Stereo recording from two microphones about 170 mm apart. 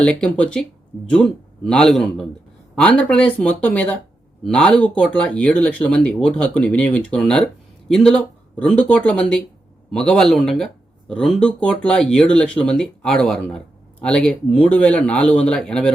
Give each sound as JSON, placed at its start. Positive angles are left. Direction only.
{"t": 0.0, "sound": "a man's voice", "side_deg": 5}